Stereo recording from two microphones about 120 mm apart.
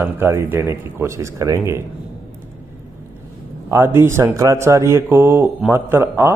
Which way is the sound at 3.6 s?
20° right (ahead or behind).